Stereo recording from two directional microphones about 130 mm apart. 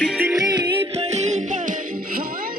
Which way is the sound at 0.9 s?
55° right (ahead or behind).